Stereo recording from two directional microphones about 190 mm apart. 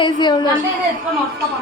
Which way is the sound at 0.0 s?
25° left (ahead or behind).